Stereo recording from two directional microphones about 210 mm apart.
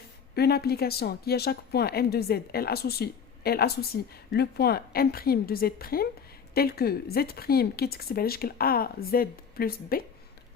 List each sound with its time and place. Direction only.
0.3 s speech: 50° left (ahead or behind)